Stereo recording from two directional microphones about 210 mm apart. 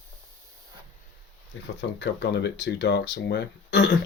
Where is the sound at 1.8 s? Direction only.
55° left (ahead or behind).